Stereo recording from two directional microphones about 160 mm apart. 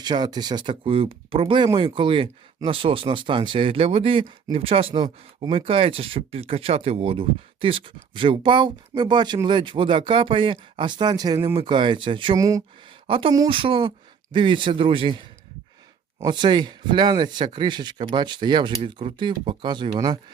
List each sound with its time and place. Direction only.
0.0 s speech: 25° right (ahead or behind)
12.4 s speech: 20° right (ahead or behind)
13.1 s speech: 35° right (ahead or behind)
16.2 s speech: 30° right (ahead or behind)